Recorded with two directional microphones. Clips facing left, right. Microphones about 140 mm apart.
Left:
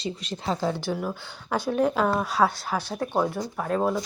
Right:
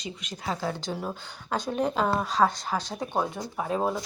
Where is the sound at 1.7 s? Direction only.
5° left (ahead or behind).